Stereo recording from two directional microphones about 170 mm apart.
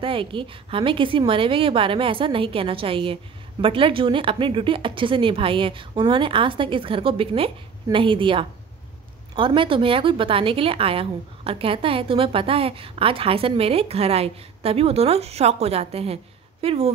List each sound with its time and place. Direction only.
0.0 s a woman's voice: 30° right (ahead or behind)